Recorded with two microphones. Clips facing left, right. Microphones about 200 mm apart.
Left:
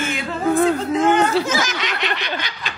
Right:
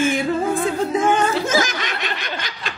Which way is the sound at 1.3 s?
50° right (ahead or behind).